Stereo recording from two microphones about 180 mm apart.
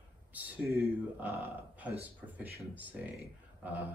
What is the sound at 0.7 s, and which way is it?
Speech, 60° right (ahead or behind).